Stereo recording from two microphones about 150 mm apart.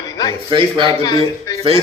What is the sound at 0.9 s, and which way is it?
Speech, 25° left (ahead or behind).